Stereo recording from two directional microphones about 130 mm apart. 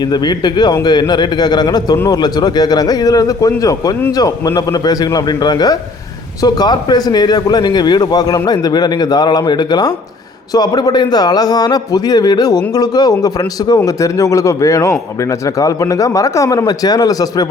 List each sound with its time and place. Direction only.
0.0 s a man's voice: 35° left (ahead or behind)